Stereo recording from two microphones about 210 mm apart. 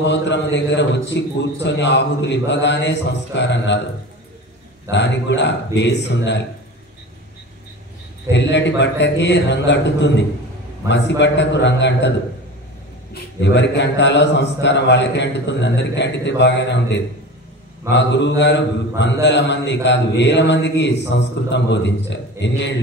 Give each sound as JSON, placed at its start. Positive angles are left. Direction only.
{"t": 0.0, "sound": "a man's voice", "side_deg": 55}
{"t": 4.9, "sound": "a man's voice", "side_deg": 60}
{"t": 8.3, "sound": "a man's voice", "side_deg": 55}
{"t": 13.1, "sound": "a man's voice", "side_deg": 55}